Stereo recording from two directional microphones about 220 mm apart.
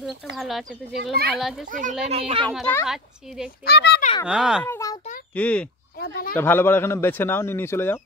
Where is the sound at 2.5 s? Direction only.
Centre (ahead or behind).